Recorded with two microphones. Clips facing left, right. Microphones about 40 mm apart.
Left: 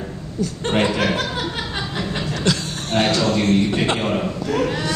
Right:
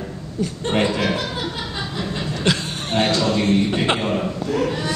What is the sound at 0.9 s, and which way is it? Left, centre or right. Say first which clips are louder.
Chuckle: left 1 dB; left.